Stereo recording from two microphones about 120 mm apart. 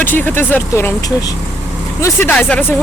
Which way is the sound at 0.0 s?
15° left (ahead or behind).